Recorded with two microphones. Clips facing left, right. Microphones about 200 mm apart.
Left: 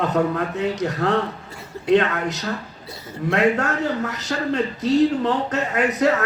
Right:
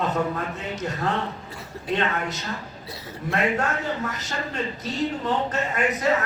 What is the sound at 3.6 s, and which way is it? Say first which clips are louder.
A man's voice: left 4 dB; 65° left (ahead or behind).